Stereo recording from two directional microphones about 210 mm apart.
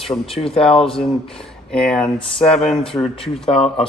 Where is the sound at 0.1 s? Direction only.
25° left (ahead or behind).